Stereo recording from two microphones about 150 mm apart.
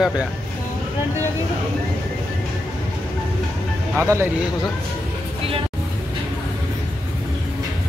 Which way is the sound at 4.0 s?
15° right (ahead or behind).